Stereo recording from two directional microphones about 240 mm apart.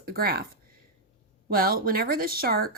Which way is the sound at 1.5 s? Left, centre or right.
Right.